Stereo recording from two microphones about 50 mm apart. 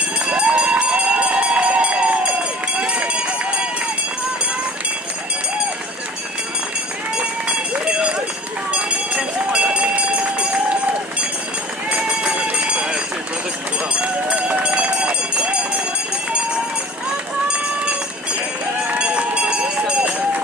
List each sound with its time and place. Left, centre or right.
0.3 s run: right
7.8 s run: centre
8.7 s a sound: centre
11.9 s run: right
14.0 s run: right
18.9 s run: centre